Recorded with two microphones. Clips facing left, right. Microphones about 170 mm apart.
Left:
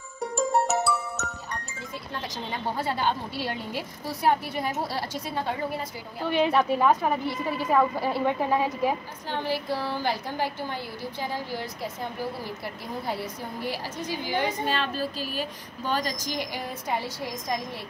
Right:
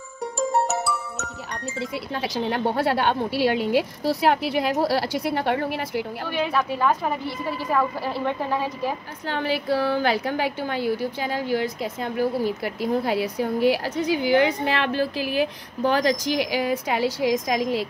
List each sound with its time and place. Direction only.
0.7 s music: centre (ahead or behind)
1.5 s a woman's voice: 80° right
6.3 s a woman's voice: 20° left (ahead or behind)
9.3 s a woman's voice: 75° right (ahead or behind)